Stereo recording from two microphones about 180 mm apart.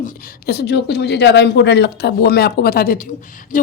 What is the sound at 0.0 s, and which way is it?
A woman's voice, 60° left (ahead or behind).